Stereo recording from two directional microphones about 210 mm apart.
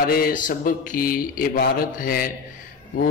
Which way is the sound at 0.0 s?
45° left (ahead or behind).